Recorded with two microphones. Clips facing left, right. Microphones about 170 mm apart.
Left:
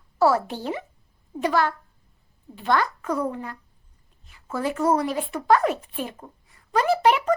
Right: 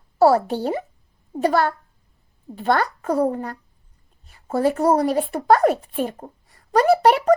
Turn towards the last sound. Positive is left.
turn(degrees=-40)  # may be behind; listen again after turning